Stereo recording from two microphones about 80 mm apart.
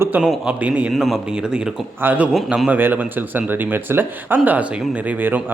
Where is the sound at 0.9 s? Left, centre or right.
Centre.